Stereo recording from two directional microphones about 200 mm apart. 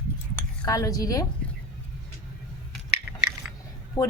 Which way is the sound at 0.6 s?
15° left (ahead or behind).